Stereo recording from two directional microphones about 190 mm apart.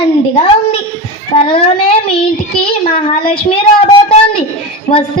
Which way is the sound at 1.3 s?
25° left (ahead or behind).